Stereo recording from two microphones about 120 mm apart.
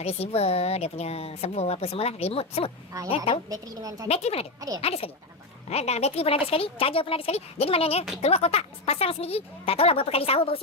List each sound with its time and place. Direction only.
0.0 s a woman's voice: 60° left (ahead or behind)
3.5 s a woman's voice: 30° right (ahead or behind)
4.1 s a woman's voice: 55° left (ahead or behind)